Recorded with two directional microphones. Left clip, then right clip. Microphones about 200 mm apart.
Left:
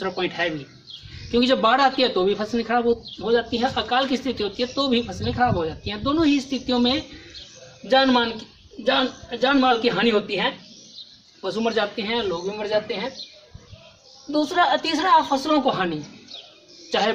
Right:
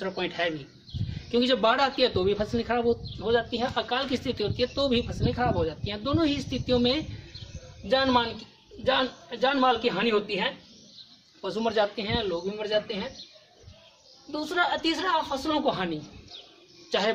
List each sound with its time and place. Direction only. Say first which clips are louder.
0.0 s a man's voice: left 4 dB; 15° right (ahead or behind)
9.3 s a man's voice: left 5 dB; 10° right (ahead or behind)
14.7 s a man's voice: left 8 dB; 15° right (ahead or behind)
16.9 s a man's voice: left 5 dB; 15° right (ahead or behind)